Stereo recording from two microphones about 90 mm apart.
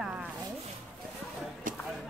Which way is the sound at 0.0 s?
15° right (ahead or behind).